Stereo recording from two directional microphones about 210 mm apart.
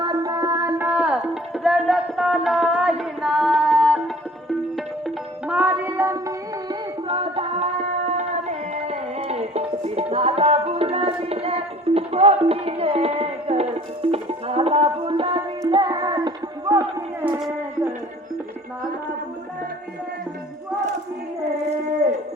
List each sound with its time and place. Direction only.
0.0 s music: 15° right (ahead or behind)